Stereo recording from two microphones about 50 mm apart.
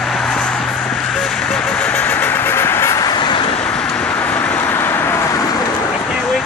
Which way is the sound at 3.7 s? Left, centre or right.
Centre.